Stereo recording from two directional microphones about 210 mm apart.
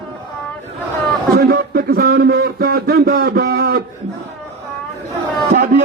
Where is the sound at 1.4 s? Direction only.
45° right (ahead or behind).